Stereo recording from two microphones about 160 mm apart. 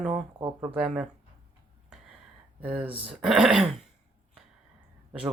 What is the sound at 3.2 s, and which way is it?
Speech, 5° right (ahead or behind).